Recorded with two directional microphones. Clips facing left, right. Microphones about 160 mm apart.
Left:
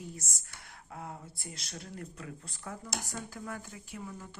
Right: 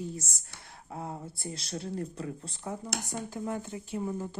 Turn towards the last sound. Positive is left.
turn(degrees=-30)  # may be behind; listen again after turning